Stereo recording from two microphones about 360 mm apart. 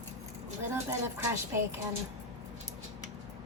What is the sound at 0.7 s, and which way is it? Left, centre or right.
Speech, centre.